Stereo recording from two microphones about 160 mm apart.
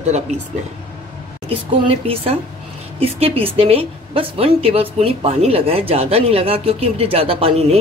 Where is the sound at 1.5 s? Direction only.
35° right (ahead or behind).